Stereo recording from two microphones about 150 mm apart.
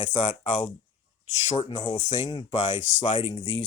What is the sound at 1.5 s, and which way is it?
Speech, 30° left (ahead or behind).